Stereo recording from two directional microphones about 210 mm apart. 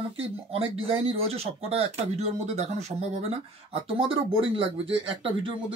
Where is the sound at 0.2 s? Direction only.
25° right (ahead or behind).